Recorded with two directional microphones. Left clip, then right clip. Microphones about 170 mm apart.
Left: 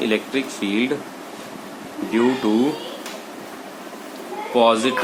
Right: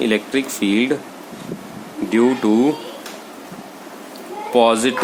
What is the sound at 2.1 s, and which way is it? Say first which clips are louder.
Speech: right 3 dB; 55° right (ahead or behind).